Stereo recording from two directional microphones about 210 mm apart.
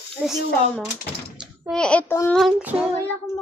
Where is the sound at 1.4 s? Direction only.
Centre (ahead or behind).